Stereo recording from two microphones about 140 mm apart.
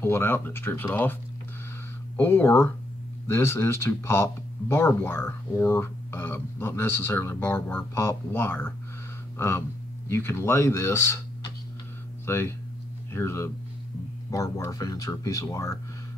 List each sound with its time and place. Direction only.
0.0 s speech: 15° left (ahead or behind)
2.1 s speech: 15° left (ahead or behind)
10.0 s speech: 20° left (ahead or behind)